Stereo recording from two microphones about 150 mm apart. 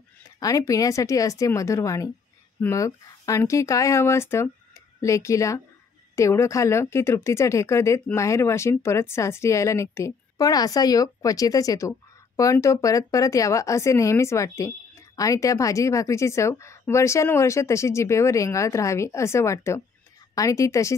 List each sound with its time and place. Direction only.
0.4 s speech: 20° left (ahead or behind)